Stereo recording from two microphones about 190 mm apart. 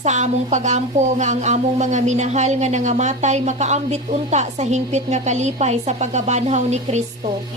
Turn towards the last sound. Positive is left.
turn(degrees=-35)  # may be behind; listen again after turning